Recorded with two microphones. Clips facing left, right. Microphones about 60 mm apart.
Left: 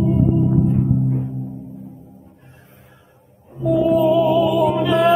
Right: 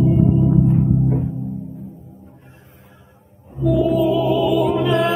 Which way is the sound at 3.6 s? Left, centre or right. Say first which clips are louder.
Left 1 dB; centre.